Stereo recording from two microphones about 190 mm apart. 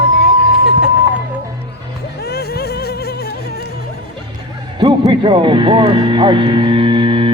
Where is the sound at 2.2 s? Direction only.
55° left (ahead or behind).